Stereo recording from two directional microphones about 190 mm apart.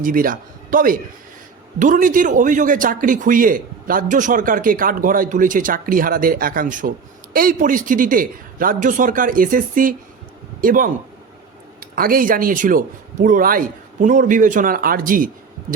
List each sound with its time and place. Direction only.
0.0 s speech: 45° right (ahead or behind)